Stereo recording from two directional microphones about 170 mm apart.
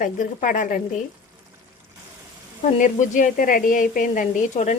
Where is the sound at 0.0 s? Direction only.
50° left (ahead or behind).